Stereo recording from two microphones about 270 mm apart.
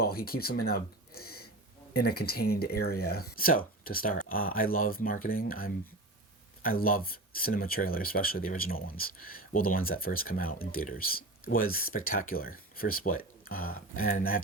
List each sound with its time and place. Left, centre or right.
0.0 s speech: left
13.9 s speech: left
14.2 s speech: left